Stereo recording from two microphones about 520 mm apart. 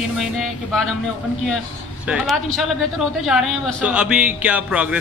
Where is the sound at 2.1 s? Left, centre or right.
Centre.